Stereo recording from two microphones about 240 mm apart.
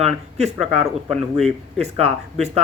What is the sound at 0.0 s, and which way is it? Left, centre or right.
Speech, right.